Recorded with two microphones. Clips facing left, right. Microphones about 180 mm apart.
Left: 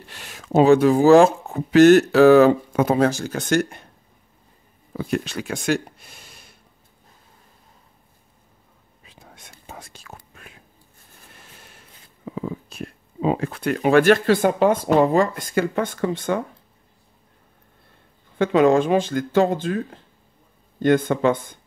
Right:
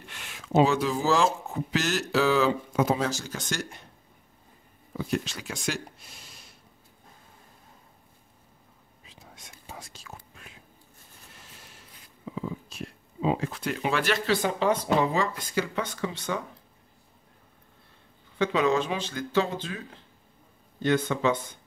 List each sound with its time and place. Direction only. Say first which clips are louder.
0.0 s speech: left 3 dB; 35° left (ahead or behind); by 3.8 s 55° left (ahead or behind)
4.9 s speech: left 5 dB; 60° left (ahead or behind)
9.0 s whispering: left 3 dB; 55° left (ahead or behind)
12.3 s speech: left 5 dB; 55° left (ahead or behind)
18.4 s speech: left 8 dB; 50° left (ahead or behind)